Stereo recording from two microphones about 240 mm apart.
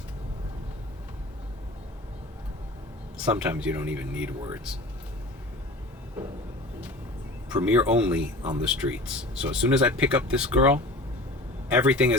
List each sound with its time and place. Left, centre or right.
3.2 s speech: centre
6.2 s cupboard open or close: centre
7.5 s speech: centre